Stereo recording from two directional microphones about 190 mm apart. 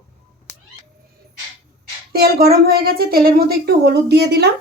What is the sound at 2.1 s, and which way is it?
Speech, 55° right (ahead or behind).